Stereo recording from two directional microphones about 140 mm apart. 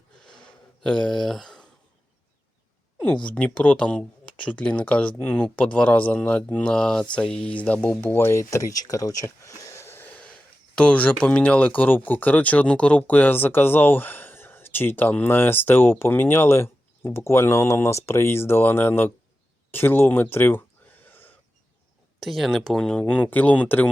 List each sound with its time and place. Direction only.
0.8 s speech: 5° left (ahead or behind)
3.2 s speech: 10° left (ahead or behind)
21.1 s wheeze: 15° left (ahead or behind)
22.2 s speech: centre (ahead or behind)